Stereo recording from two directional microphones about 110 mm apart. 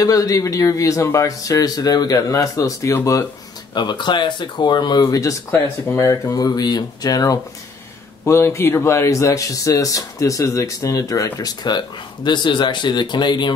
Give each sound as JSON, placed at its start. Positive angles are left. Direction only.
{"t": 0.0, "sound": "speech", "side_deg": 30}
{"t": 3.7, "sound": "speech", "side_deg": 40}
{"t": 5.0, "sound": "speech", "side_deg": 30}
{"t": 8.3, "sound": "speech", "side_deg": 25}